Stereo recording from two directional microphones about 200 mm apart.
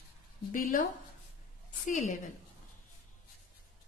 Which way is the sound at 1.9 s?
40° left (ahead or behind).